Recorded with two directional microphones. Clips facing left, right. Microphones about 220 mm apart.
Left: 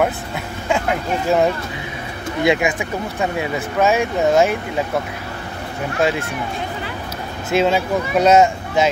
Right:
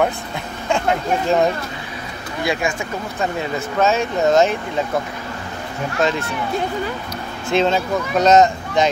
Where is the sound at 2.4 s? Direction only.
20° left (ahead or behind).